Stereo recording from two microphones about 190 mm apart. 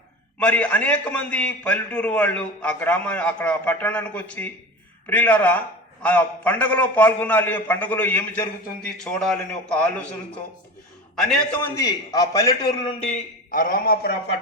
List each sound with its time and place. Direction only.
0.3 s a man's voice: 5° left (ahead or behind)
11.2 s a man's voice: centre (ahead or behind)
11.7 s a man's voice: 20° left (ahead or behind)
13.5 s a man's voice: 45° left (ahead or behind)